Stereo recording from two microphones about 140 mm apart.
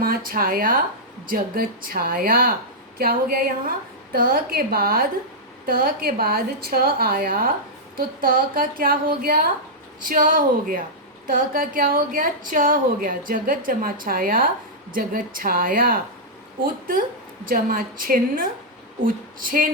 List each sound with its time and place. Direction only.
0.0 s a woman's voice: 90° right
11.3 s a woman's voice: 90° right
19.0 s a sound: 80° right